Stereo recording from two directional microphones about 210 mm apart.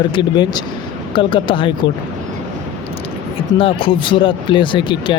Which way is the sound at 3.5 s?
25° left (ahead or behind).